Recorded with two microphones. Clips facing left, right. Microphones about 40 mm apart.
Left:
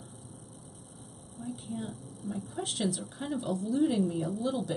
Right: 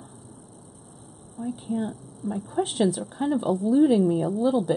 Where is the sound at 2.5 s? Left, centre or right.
Right.